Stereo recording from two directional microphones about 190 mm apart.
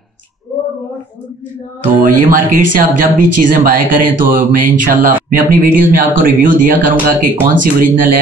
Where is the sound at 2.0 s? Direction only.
45° right (ahead or behind).